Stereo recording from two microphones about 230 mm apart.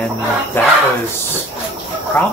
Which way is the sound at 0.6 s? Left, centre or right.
Centre.